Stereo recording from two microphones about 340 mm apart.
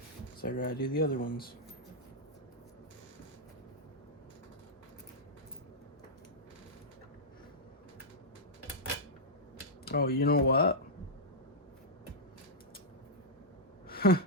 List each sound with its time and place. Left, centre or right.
0.4 s speech: left
9.8 s speech: left
13.8 s a sound: left